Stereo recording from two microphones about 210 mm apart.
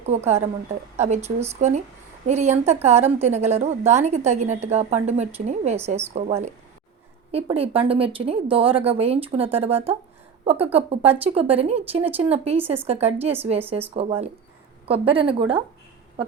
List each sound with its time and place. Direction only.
0.0 s a woman's voice: 30° right (ahead or behind)